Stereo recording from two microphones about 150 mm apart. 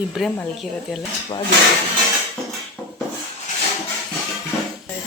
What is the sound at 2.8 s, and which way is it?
Rub, 5° left (ahead or behind).